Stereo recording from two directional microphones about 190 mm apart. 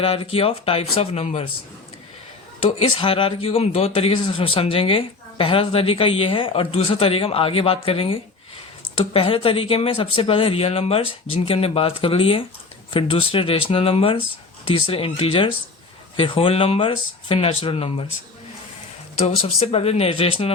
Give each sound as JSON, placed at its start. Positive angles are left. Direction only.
{"t": 0.0, "sound": "speech", "side_deg": 30}
{"t": 2.6, "sound": "speech", "side_deg": 30}
{"t": 19.2, "sound": "speech", "side_deg": 35}